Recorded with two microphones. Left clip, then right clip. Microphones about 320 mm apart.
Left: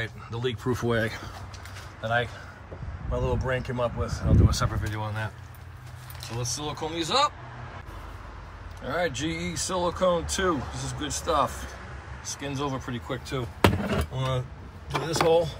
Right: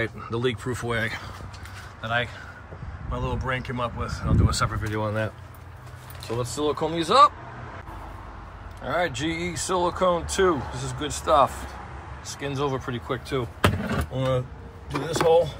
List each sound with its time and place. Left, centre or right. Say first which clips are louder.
0.0 s speech: right 5 dB; centre
8.8 s speech: right 3 dB; centre
13.7 s speech: even; centre
14.9 s speech: right 2 dB; centre